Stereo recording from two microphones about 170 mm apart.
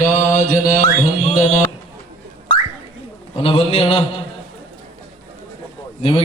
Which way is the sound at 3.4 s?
30° left (ahead or behind).